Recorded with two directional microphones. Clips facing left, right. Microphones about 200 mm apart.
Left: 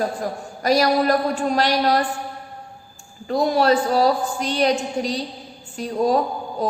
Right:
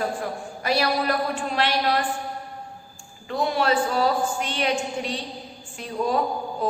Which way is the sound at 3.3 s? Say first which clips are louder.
Left 5 dB; 40° left (ahead or behind).